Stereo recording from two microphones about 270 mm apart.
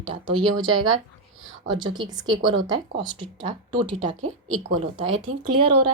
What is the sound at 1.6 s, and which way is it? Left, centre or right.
Speech, centre.